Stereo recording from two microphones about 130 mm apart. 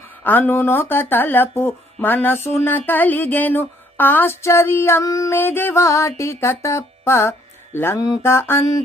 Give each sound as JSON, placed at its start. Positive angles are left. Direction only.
{"t": 0.3, "sound": "speech", "side_deg": 15}